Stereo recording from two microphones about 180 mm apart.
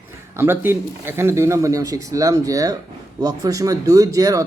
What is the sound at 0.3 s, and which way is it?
A man's voice, 10° right (ahead or behind).